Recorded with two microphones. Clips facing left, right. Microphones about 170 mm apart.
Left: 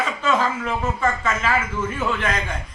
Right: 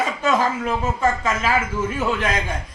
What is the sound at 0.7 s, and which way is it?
Speech, 10° right (ahead or behind).